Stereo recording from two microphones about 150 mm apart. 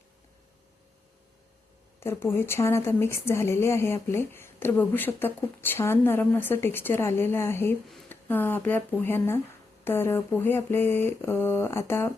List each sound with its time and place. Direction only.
2.0 s speech: 15° left (ahead or behind)